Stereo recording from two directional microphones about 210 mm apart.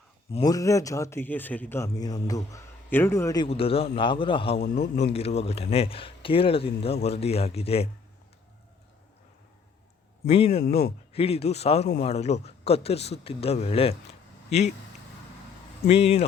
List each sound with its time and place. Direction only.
0.3 s a man's voice: 20° left (ahead or behind)
10.2 s a man's voice: 25° left (ahead or behind)
15.9 s a man's voice: 30° left (ahead or behind)